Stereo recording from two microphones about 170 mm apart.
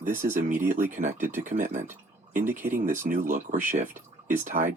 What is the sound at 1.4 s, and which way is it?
Speech, 50° right (ahead or behind).